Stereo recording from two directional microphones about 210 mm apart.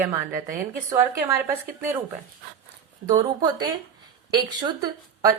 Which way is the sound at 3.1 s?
20° right (ahead or behind).